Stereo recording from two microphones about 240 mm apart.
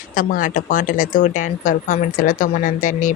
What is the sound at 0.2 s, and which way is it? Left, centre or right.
A woman's voice, left.